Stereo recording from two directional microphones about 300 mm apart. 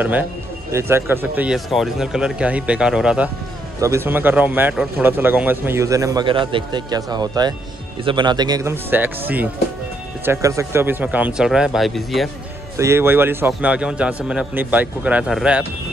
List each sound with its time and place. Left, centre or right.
0.7 s a man's voice: centre